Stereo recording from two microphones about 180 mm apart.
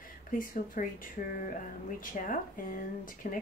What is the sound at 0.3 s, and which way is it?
Speech, 50° left (ahead or behind).